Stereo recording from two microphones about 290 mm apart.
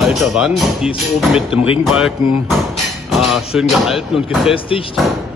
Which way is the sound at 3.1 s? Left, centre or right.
Centre.